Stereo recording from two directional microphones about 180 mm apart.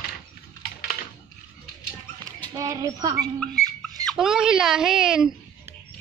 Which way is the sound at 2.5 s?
15° right (ahead or behind).